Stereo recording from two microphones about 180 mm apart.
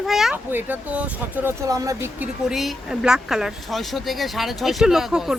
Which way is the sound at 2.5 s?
Centre (ahead or behind).